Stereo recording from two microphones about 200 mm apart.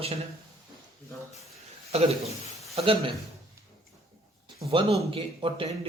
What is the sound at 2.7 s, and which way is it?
Speech, 25° right (ahead or behind).